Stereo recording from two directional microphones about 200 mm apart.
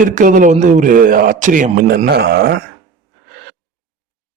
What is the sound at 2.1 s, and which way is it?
Speech, 55° right (ahead or behind).